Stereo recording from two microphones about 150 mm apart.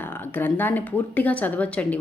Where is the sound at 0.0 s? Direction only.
15° left (ahead or behind).